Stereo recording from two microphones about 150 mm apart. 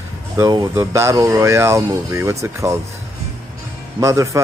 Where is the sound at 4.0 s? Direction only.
20° right (ahead or behind).